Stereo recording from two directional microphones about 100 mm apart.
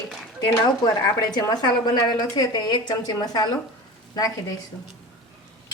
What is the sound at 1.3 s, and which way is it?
A woman's voice, 45° left (ahead or behind).